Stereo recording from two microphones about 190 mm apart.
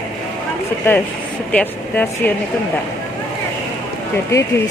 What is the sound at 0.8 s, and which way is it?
A woman's voice, 10° left (ahead or behind).